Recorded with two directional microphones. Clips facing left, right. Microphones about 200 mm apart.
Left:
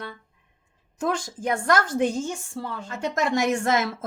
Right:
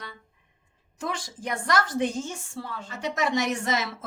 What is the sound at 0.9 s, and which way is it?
A woman's voice, 50° left (ahead or behind).